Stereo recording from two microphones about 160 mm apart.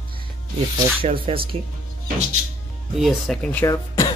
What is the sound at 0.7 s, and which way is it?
Speech, 35° right (ahead or behind).